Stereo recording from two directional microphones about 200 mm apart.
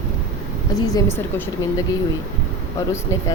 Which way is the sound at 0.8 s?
20° left (ahead or behind).